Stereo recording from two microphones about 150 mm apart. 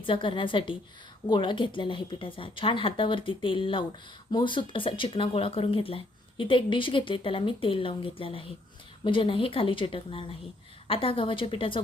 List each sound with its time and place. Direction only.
0.0 s speech: 35° left (ahead or behind)